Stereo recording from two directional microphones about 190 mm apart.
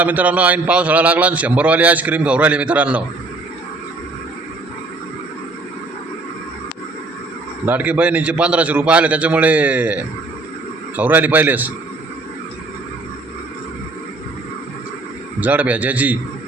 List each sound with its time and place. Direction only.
0.0 s a man's voice: 10° right (ahead or behind)
7.6 s a man's voice: 10° right (ahead or behind)
15.4 s a man's voice: 10° right (ahead or behind)